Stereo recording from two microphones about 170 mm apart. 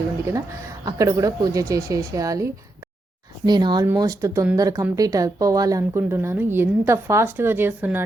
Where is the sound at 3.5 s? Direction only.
25° right (ahead or behind).